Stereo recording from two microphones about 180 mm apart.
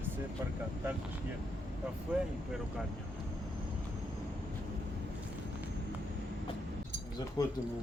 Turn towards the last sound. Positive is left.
turn(degrees=20)  # may be behind; listen again after turning